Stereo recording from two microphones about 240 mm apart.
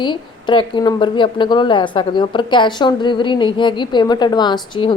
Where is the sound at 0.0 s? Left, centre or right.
Centre.